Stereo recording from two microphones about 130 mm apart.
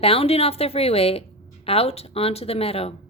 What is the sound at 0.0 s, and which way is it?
A woman's voice, 50° left (ahead or behind).